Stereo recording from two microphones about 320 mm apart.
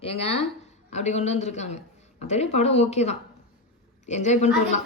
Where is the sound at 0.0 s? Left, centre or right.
Centre.